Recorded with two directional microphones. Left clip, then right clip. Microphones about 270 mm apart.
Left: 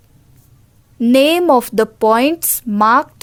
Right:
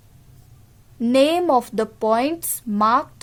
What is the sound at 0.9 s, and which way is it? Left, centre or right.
A woman's voice, left.